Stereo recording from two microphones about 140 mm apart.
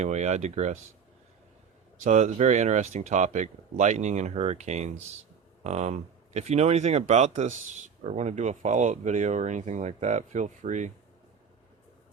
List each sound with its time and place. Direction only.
0.0 s speech: 55° right (ahead or behind)
2.0 s speech: 55° right (ahead or behind)